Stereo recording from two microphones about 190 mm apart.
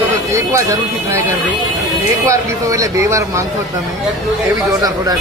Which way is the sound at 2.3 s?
15° right (ahead or behind).